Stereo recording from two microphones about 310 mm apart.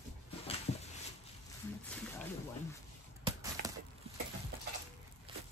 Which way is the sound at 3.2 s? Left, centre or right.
Centre.